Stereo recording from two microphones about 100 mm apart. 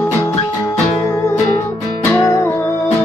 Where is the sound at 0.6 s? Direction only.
25° left (ahead or behind).